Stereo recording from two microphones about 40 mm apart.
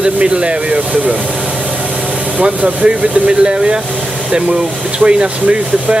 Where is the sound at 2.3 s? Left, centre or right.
Right.